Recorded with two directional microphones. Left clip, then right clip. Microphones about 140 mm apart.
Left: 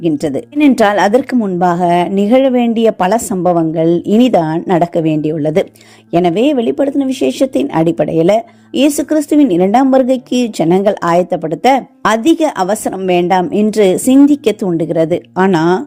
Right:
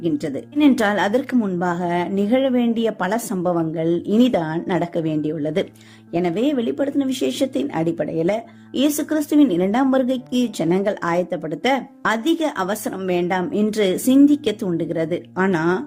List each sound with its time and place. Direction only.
0.0 s speech: 50° left (ahead or behind)